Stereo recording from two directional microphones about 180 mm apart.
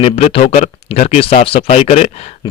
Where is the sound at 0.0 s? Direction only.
30° left (ahead or behind).